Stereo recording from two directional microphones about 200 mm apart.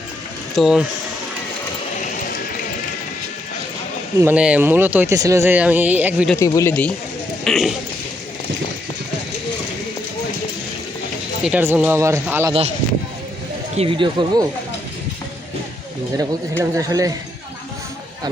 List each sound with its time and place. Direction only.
0.5 s speech: centre (ahead or behind)
4.2 s speech: 10° right (ahead or behind)
6.4 s speech: 15° left (ahead or behind); by 7.8 s centre (ahead or behind)
11.4 s speech: 10° right (ahead or behind)
13.7 s speech: 25° right (ahead or behind)
16.1 s speech: 15° right (ahead or behind)